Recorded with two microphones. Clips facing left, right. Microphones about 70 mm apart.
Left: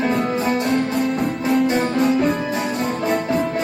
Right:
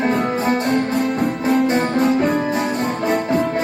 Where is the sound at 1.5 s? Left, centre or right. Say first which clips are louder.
Right 1 dB; centre.